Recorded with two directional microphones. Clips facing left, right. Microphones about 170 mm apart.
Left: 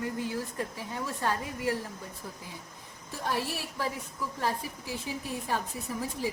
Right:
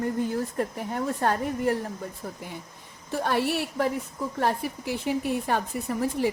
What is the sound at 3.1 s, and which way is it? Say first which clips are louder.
A woman's voice: right 7 dB; 70° right (ahead or behind).